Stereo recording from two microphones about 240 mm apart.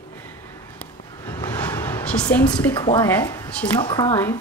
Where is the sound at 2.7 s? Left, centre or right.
Centre.